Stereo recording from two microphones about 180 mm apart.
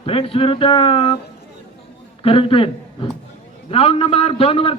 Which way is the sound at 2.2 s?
30° left (ahead or behind).